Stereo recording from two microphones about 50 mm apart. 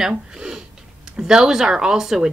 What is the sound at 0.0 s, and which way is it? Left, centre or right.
Speech, centre.